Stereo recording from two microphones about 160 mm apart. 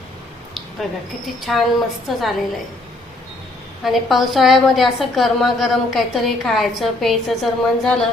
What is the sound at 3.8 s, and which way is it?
A woman's voice, centre (ahead or behind).